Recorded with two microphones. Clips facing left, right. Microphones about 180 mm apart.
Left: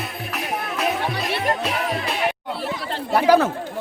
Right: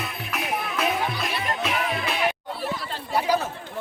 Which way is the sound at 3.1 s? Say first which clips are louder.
Left 8 dB; 75° left (ahead or behind).